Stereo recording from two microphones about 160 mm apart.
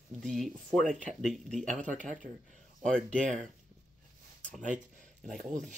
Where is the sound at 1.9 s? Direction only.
55° right (ahead or behind).